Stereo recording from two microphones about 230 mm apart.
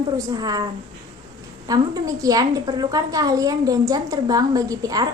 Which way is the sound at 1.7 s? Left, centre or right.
Centre.